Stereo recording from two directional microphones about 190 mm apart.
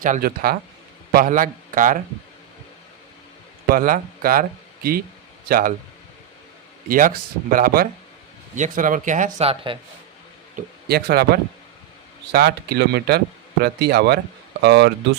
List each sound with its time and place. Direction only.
0.0 s speech: 50° right (ahead or behind)
3.7 s speech: 50° right (ahead or behind)
6.8 s speech: 45° right (ahead or behind)
9.7 s a man's voice: 25° right (ahead or behind)
10.8 s speech: 55° right (ahead or behind)